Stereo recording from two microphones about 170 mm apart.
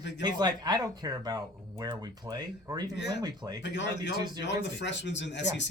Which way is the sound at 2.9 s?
90° left.